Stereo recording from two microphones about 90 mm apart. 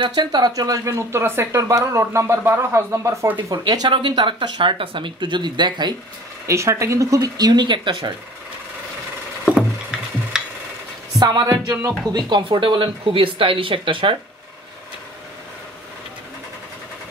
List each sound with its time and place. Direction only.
0.0 s speech: 55° right (ahead or behind); by 3.3 s 35° right (ahead or behind)
3.4 s speech: 45° right (ahead or behind)
3.9 s speech: 60° right (ahead or behind)
6.4 s speech: 35° right (ahead or behind); by 8.0 s 55° right (ahead or behind)
9.6 s wood: 5° right (ahead or behind)
11.1 s speech: 50° right (ahead or behind)
12.3 s speech: 65° right (ahead or behind)